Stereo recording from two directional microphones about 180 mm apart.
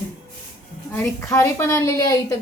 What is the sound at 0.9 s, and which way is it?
A woman's voice, 15° left (ahead or behind).